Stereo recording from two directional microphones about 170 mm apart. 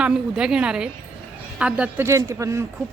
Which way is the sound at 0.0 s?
5° right (ahead or behind).